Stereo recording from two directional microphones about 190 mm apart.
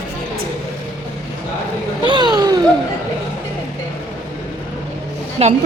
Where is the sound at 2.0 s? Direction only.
25° right (ahead or behind).